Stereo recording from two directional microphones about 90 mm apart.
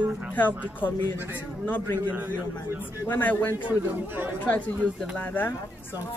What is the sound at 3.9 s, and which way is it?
Speech, 20° right (ahead or behind).